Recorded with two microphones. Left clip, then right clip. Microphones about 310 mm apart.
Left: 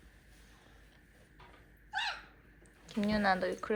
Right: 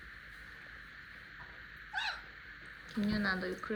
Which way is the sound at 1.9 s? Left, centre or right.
Centre.